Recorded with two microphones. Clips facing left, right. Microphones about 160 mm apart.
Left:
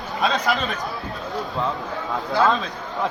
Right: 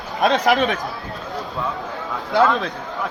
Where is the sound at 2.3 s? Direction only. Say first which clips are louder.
Right 3 dB; 70° right (ahead or behind).